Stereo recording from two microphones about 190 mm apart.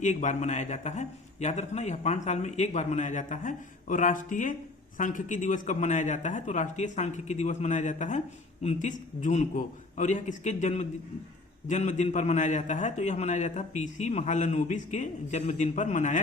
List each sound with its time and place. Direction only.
0.0 s a man's voice: 40° left (ahead or behind)